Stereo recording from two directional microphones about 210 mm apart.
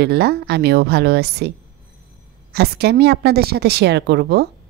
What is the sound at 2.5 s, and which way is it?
A woman's voice, 50° right (ahead or behind).